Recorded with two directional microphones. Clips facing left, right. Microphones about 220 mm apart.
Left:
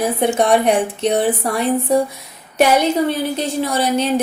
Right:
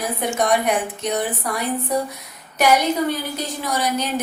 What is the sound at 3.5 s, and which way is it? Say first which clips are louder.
Speech: left 3 dB; 30° left (ahead or behind).